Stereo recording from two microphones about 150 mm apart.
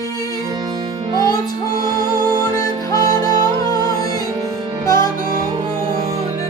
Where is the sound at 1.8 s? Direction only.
30° right (ahead or behind).